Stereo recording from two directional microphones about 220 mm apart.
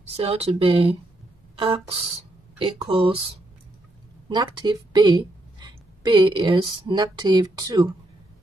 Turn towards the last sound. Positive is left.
turn(degrees=-20)  # may be behind; listen again after turning